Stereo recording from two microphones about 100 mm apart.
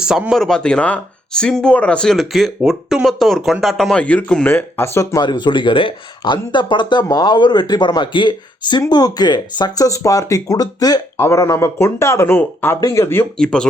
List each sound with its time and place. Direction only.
0.0 s speech: 5° right (ahead or behind)
0.4 s speech: 10° left (ahead or behind)
2.1 s speech: centre (ahead or behind)
4.5 s speech: 30° left (ahead or behind)
5.2 s speech: 50° left (ahead or behind)
11.2 s speech: 30° left (ahead or behind)
13.3 s speech: 10° left (ahead or behind)